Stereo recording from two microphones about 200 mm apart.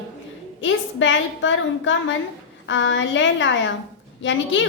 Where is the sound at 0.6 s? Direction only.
70° left (ahead or behind).